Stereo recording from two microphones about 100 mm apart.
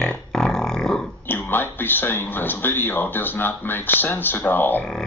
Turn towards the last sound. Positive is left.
turn(degrees=20)  # may be behind; listen again after turning